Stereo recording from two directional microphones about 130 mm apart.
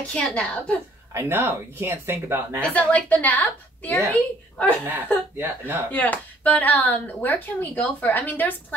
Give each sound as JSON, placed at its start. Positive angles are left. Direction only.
{"t": 0.0, "sound": "speech", "side_deg": 10}
{"t": 1.1, "sound": "speech", "side_deg": -20}
{"t": 2.7, "sound": "speech", "side_deg": 10}
{"t": 4.8, "sound": "speech", "side_deg": -15}
{"t": 5.9, "sound": "speech", "side_deg": 10}